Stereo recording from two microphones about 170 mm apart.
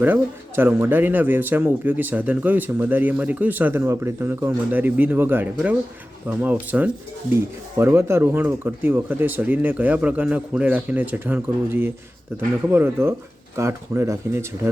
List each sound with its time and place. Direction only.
0.0 s speech: 10° right (ahead or behind)